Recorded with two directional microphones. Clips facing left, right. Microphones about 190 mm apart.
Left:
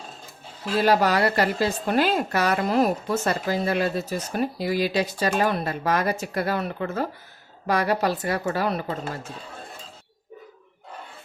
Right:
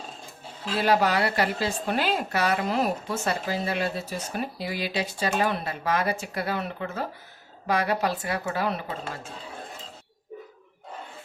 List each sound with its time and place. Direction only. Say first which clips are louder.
0.8 s a woman's voice: left 3 dB; 40° left (ahead or behind)